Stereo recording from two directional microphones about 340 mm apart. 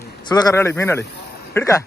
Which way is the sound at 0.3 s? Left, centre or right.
Centre.